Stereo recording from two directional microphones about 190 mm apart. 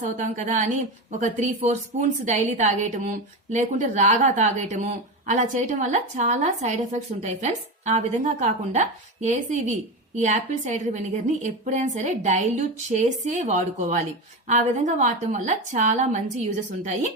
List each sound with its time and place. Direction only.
0.0 s a woman's voice: 40° right (ahead or behind)